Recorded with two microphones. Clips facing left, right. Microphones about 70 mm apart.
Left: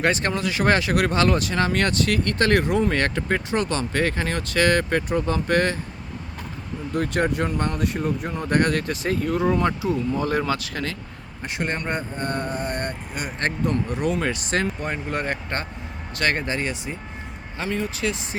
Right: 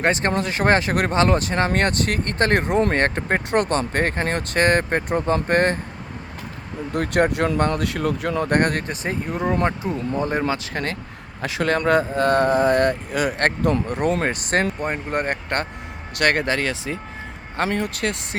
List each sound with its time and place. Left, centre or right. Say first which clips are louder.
0.0 s speech: right 2 dB; right
3.5 s speech: right 3 dB; right
6.9 s speech: right 3 dB; right
8.4 s speech: left 1 dB; right
8.9 s speech: left 2 dB; right
11.6 s speech: right 9 dB; right
17.6 s speech: right 3 dB; right